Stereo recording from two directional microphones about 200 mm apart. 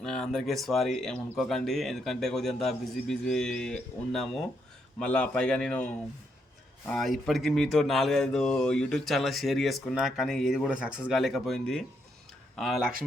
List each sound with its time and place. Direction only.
0.0 s speech: 5° left (ahead or behind)